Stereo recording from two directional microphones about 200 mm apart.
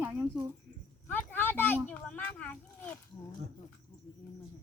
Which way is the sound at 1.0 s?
10° left (ahead or behind).